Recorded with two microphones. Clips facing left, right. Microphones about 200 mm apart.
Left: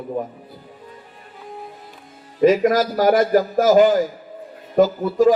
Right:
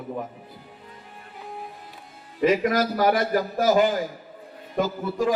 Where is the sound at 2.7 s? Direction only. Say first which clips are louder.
Left 4 dB; 35° left (ahead or behind).